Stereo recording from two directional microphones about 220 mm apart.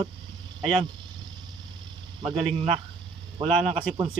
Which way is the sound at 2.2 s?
25° right (ahead or behind).